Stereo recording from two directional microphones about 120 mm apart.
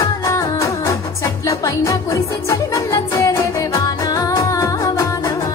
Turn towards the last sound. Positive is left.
turn(degrees=30)  # may be behind; listen again after turning